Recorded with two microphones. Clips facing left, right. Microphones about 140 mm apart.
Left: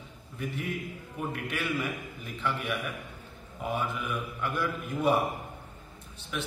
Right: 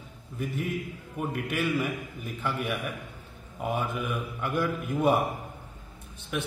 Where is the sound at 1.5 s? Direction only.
45° right (ahead or behind).